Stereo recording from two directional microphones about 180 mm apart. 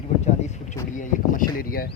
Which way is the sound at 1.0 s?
50° left (ahead or behind).